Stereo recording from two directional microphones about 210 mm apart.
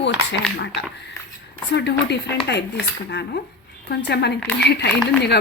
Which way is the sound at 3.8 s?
50° left (ahead or behind).